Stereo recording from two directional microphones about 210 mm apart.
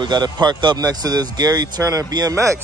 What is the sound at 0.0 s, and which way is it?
Speech, 20° right (ahead or behind).